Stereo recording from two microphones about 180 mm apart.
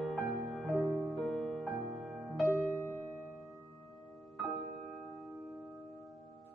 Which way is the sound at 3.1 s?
15° right (ahead or behind).